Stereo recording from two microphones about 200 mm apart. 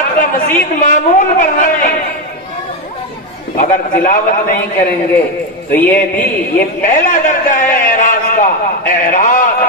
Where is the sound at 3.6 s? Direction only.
40° left (ahead or behind).